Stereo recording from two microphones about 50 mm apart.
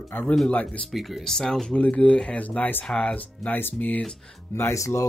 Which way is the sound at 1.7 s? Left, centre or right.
Left.